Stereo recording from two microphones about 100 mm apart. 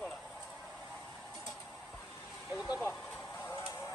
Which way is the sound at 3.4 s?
25° left (ahead or behind).